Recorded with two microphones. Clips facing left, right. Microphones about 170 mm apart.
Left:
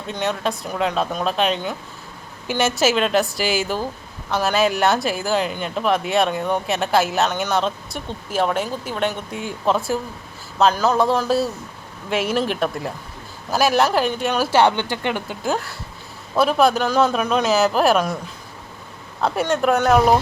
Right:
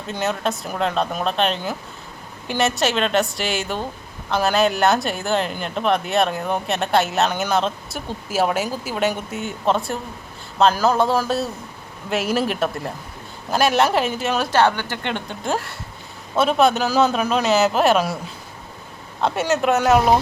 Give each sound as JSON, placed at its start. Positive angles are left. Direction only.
{"t": 0.1, "sound": "speech", "side_deg": 0}
{"t": 14.7, "sound": "speech", "side_deg": 20}
{"t": 15.0, "sound": "speech", "side_deg": 5}
{"t": 19.2, "sound": "speech", "side_deg": 0}